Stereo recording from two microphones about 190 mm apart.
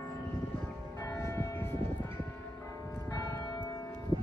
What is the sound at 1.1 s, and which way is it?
Church bell, 15° left (ahead or behind).